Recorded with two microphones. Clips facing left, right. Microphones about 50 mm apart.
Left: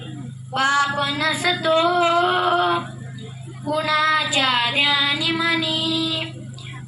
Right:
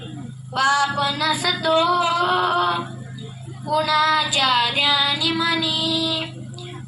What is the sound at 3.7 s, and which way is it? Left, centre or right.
Child singing, left.